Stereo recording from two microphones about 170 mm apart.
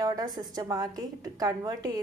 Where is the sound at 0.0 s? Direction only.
20° right (ahead or behind).